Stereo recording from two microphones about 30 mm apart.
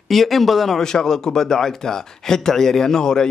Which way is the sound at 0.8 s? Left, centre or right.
Centre.